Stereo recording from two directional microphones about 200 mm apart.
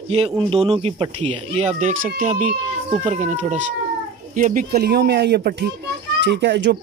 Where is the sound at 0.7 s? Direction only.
25° right (ahead or behind).